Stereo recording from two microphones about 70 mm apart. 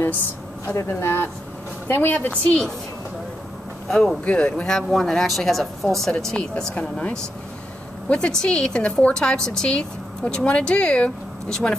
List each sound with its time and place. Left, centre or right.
0.7 s a woman's voice: left; by 2.7 s centre
4.2 s a woman's voice: centre
4.6 s a woman's voice: centre